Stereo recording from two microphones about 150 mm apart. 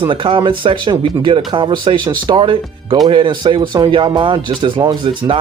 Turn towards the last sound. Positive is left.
turn(degrees=-35)  # may be behind; listen again after turning